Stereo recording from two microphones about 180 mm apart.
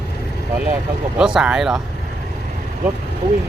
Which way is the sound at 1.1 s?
5° right (ahead or behind).